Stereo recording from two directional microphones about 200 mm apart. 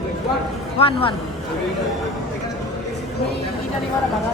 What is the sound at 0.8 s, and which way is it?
Speech, 25° left (ahead or behind).